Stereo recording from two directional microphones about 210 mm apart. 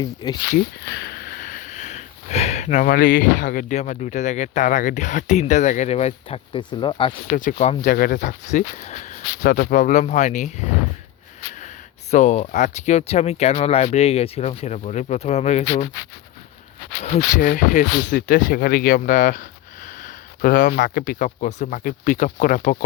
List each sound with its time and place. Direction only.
0.0 s speech: 20° left (ahead or behind)
0.9 s sniff: 50° left (ahead or behind); by 7.1 s 20° left (ahead or behind)
7.3 s speech: 40° left (ahead or behind)
12.1 s speech: 35° left (ahead or behind)
17.0 s speech: 35° left (ahead or behind)